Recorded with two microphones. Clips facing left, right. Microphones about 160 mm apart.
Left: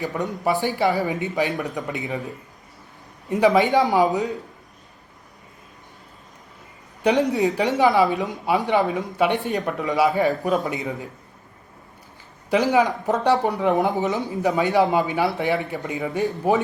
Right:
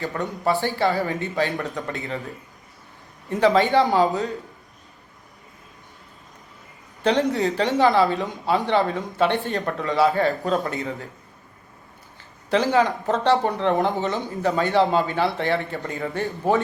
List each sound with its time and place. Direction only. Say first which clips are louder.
0.0 s speech: left 1 dB; 10° left (ahead or behind)
3.2 s speech: left 1 dB; 15° left (ahead or behind)
7.0 s speech: left 1 dB; 15° left (ahead or behind)
12.5 s speech: left 1 dB; 15° left (ahead or behind)